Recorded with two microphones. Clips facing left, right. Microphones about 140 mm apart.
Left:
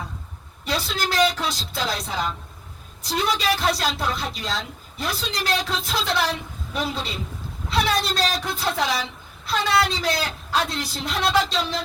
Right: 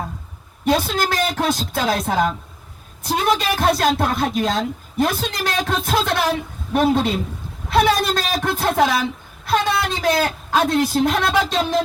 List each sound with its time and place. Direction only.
0.6 s a woman's voice: 50° right (ahead or behind)